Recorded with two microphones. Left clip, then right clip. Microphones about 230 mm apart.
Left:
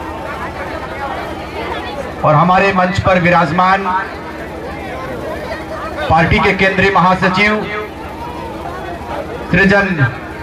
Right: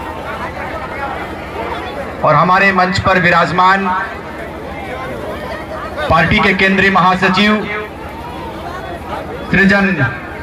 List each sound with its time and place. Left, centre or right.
2.2 s speech: right
6.0 s a man's voice: right
9.5 s speech: right